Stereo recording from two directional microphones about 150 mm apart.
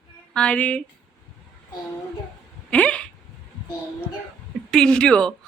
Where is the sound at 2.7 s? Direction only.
10° left (ahead or behind).